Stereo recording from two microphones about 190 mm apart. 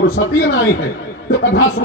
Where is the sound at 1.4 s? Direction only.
90° left.